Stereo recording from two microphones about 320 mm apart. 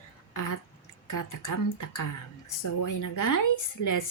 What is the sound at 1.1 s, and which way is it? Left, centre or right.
Speech, left.